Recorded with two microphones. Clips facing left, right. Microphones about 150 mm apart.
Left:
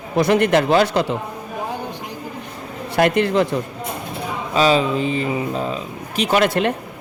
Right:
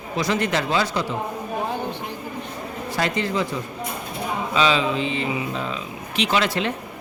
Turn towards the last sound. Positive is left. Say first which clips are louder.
# left 5 dB
turn(degrees=55)  # may be behind; listen again after turning